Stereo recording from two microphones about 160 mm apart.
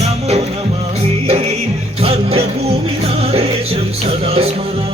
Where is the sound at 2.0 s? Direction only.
40° right (ahead or behind).